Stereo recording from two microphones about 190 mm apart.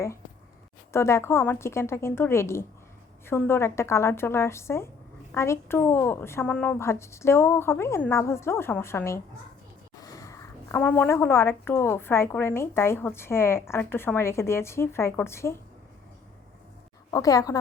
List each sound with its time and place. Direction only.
0.9 s a woman's voice: 15° left (ahead or behind)
17.1 s a woman's voice: 20° left (ahead or behind)